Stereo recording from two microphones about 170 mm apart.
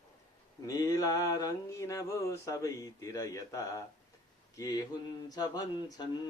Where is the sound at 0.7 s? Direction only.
20° left (ahead or behind).